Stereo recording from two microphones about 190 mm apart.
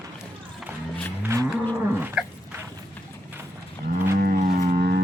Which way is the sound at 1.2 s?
15° right (ahead or behind).